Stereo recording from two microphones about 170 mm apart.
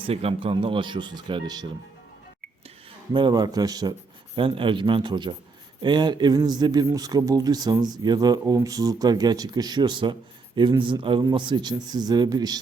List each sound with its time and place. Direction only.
0.1 s speech: 35° right (ahead or behind)
2.6 s speech: 30° right (ahead or behind)